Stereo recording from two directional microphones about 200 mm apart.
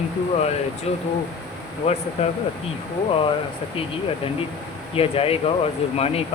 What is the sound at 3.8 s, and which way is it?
Speech, 25° left (ahead or behind).